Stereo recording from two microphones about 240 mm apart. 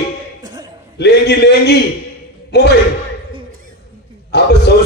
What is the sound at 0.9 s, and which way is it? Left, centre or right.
A man's voice, left.